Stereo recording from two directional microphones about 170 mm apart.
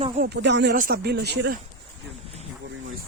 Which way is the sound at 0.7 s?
60° right (ahead or behind).